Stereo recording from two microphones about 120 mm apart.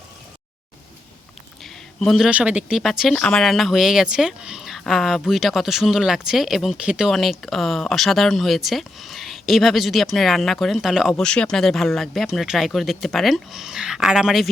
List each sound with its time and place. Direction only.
1.6 s speech: centre (ahead or behind)
11.1 s speech: 10° left (ahead or behind)